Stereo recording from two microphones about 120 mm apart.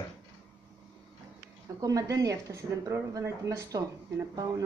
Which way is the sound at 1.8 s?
30° right (ahead or behind).